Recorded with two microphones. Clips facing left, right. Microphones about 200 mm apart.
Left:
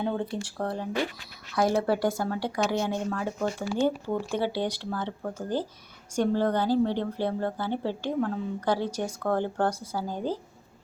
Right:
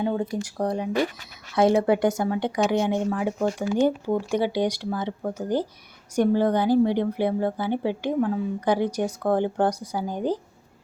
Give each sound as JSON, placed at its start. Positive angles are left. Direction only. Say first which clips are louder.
{"t": 0.0, "sound": "a woman's voice", "louder": "right 4 dB", "side_deg": -5}
{"t": 0.3, "sound": "a woman's voice", "louder": "right 5 dB", "side_deg": -20}